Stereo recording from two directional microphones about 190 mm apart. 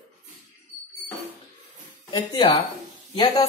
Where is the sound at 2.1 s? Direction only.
20° left (ahead or behind).